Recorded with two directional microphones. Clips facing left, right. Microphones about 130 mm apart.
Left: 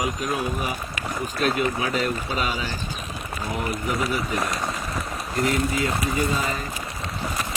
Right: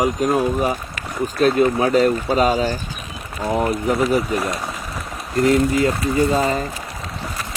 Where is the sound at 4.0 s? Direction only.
Centre (ahead or behind).